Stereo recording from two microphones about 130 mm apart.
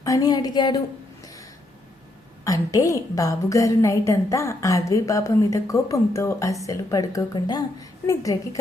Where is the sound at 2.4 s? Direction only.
25° left (ahead or behind).